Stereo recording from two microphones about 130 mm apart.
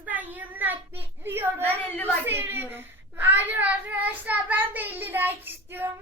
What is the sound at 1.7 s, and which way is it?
Speech, 10° left (ahead or behind).